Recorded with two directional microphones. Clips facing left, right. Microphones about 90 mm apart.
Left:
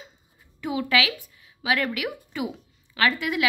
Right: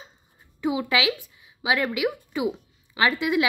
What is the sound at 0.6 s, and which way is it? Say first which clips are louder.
A woman's voice: even; 20° right (ahead or behind).